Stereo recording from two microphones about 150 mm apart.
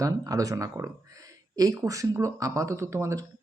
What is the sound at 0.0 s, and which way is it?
Speech, 20° right (ahead or behind).